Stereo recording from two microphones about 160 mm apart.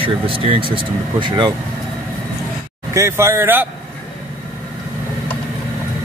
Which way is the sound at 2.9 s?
20° right (ahead or behind).